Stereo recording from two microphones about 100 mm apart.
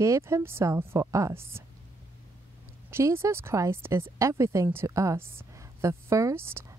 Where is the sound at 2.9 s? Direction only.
25° right (ahead or behind).